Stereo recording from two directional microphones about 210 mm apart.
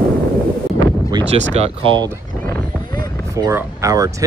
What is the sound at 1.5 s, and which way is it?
Speech, 25° right (ahead or behind).